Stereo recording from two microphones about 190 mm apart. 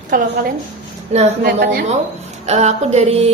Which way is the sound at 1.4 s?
55° right (ahead or behind).